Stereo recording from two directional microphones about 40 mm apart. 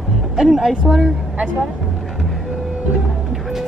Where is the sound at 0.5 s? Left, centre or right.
Centre.